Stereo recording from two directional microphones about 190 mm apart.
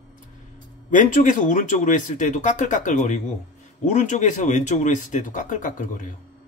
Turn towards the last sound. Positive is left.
turn(degrees=45)  # may be behind; listen again after turning